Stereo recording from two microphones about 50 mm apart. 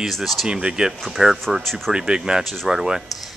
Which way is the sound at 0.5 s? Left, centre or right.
Centre.